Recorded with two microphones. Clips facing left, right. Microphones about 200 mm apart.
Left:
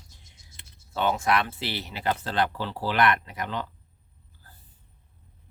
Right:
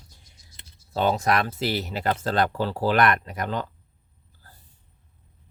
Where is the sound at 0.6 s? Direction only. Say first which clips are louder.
Right 4 dB; 40° right (ahead or behind).